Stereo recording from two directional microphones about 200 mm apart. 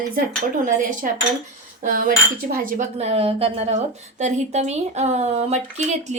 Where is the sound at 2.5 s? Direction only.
45° right (ahead or behind).